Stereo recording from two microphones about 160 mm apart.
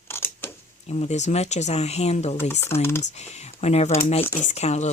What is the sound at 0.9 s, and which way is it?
Speech, 45° left (ahead or behind).